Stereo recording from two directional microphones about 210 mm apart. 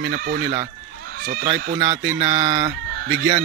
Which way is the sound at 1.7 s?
25° right (ahead or behind).